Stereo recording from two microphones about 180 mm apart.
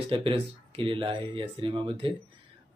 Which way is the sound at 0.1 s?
30° right (ahead or behind).